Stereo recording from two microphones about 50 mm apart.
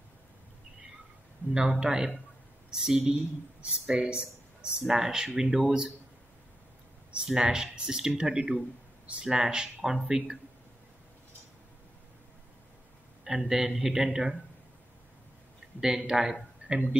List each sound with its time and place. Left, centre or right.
1.5 s speech: centre
4.2 s a sound: centre
4.8 s speech: centre
7.2 s speech: centre
13.2 s speech: centre
16.0 s speech: centre
16.6 s a sound: right